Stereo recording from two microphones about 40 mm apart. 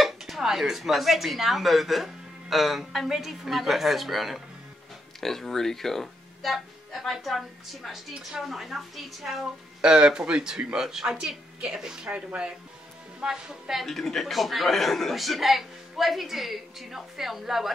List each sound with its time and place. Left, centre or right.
0.0 s speech: centre
9.8 s speech: right
13.2 s speech: centre
13.7 s speech: centre